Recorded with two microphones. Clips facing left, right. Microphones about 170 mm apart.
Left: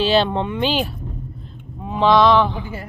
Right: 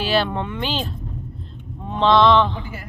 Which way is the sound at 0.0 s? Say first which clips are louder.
Left 4 dB; 25° left (ahead or behind).